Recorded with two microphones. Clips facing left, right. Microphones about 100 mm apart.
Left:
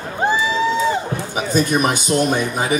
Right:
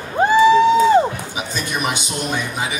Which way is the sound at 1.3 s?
45° left (ahead or behind).